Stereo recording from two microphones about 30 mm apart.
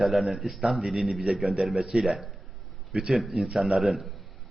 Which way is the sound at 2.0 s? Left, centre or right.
Centre.